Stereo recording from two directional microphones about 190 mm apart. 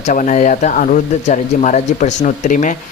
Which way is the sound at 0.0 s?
40° left (ahead or behind).